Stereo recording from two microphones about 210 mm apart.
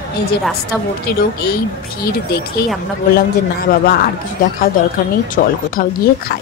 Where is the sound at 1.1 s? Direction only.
50° left (ahead or behind).